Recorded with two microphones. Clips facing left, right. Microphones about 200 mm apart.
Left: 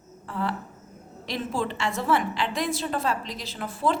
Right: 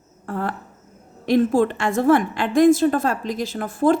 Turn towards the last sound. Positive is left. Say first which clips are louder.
# right 8 dB
turn(degrees=-45)  # may be behind; listen again after turning